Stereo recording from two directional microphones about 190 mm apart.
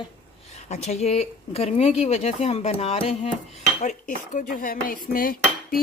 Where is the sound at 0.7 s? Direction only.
35° left (ahead or behind).